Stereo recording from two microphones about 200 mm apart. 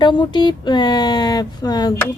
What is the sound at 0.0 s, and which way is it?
Speech, 25° left (ahead or behind).